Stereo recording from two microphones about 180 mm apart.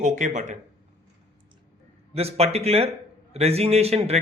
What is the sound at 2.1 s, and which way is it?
A man's voice, 35° right (ahead or behind).